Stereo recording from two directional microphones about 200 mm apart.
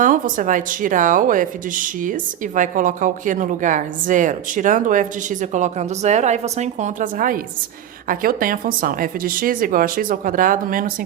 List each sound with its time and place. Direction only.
0.0 s a woman's voice: 40° right (ahead or behind)